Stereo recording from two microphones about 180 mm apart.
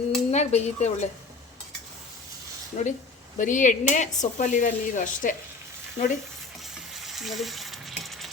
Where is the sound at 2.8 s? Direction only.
45° left (ahead or behind).